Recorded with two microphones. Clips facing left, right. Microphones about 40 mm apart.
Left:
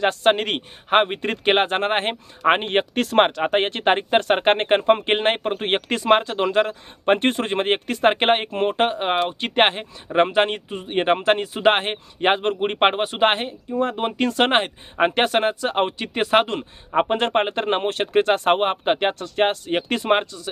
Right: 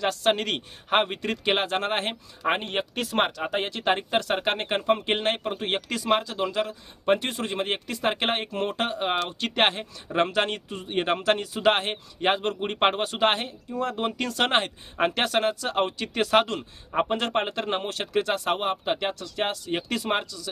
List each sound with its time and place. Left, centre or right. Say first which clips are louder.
0.0 s speech: left 5 dB; left